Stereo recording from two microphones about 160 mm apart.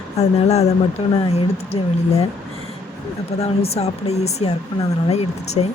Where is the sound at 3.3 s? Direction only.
40° left (ahead or behind).